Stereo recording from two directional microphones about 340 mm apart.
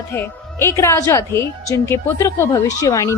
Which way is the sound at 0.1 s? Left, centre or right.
Centre.